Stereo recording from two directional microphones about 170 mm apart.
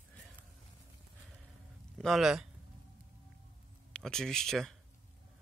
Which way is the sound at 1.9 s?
Centre (ahead or behind).